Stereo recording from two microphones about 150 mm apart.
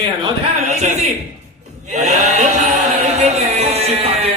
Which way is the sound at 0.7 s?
50° right (ahead or behind).